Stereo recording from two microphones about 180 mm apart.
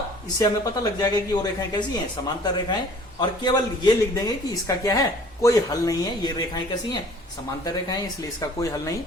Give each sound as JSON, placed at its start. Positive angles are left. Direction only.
{"t": 0.3, "sound": "speech", "side_deg": 20}